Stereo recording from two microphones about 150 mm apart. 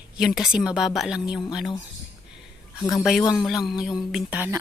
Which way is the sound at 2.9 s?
Centre (ahead or behind).